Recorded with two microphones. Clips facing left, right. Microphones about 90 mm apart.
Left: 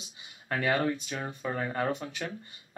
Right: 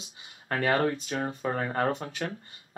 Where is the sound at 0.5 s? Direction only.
45° right (ahead or behind).